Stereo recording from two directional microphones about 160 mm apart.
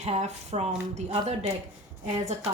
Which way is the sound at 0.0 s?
45° right (ahead or behind).